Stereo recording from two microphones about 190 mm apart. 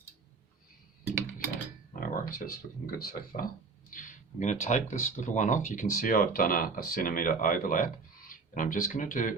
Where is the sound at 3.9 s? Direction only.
45° left (ahead or behind).